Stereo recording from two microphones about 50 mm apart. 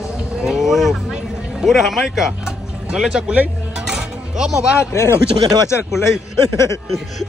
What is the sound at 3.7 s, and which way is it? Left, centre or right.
Music, centre.